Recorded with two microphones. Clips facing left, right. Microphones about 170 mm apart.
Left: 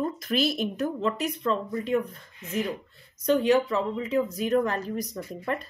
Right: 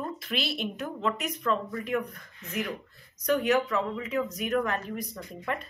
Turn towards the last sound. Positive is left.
turn(degrees=40)  # may be behind; listen again after turning